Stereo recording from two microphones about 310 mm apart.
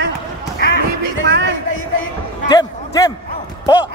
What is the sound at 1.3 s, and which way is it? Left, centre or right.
Music, right.